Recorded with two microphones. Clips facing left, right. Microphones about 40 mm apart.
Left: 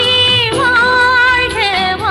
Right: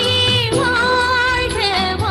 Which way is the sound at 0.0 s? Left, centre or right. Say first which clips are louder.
Left 5 dB; left.